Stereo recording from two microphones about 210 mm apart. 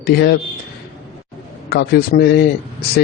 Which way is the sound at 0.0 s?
50° left (ahead or behind).